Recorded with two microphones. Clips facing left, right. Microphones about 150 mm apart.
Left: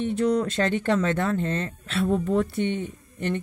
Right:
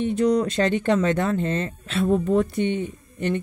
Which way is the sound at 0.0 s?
15° right (ahead or behind).